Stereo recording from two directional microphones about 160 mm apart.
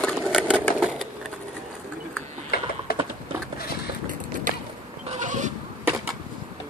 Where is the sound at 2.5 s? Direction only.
70° left (ahead or behind).